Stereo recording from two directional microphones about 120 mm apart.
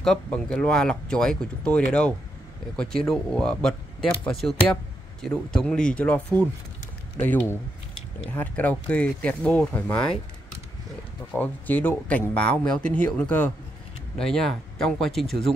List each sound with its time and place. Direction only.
0.0 s a man's voice: 5° left (ahead or behind)
5.2 s a man's voice: 5° left (ahead or behind)
11.3 s a man's voice: 15° left (ahead or behind)